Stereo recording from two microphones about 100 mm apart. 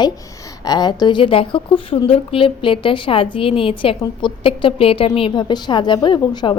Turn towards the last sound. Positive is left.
turn(degrees=45)  # may be behind; listen again after turning